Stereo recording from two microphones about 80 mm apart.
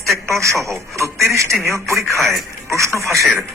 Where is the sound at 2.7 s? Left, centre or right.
Right.